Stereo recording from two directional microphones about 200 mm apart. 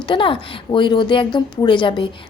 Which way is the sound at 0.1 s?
25° left (ahead or behind).